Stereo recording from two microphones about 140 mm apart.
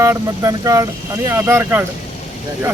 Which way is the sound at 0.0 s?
25° right (ahead or behind).